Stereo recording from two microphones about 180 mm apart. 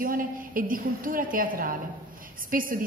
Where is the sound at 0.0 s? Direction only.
50° right (ahead or behind).